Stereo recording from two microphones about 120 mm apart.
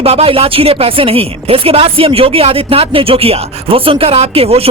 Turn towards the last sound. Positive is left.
turn(degrees=-55)  # may be behind; listen again after turning